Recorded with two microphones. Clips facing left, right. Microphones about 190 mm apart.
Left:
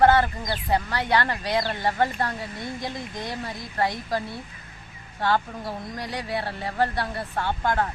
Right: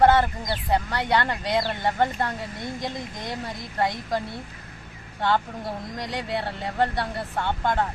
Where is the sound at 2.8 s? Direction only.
20° right (ahead or behind).